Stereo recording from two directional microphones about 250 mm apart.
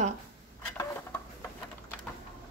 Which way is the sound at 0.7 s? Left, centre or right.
Centre.